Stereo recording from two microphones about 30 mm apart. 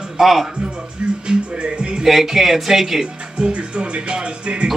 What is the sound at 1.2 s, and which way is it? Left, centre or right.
Speech, right.